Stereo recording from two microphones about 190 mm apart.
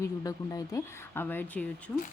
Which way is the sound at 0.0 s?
15° left (ahead or behind).